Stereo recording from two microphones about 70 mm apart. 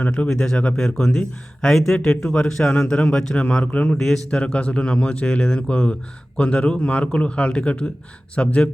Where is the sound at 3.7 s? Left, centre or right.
Left.